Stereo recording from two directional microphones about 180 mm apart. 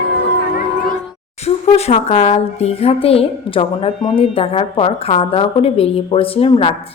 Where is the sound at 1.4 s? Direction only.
35° left (ahead or behind).